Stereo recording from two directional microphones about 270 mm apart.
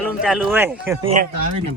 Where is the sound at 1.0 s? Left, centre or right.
Right.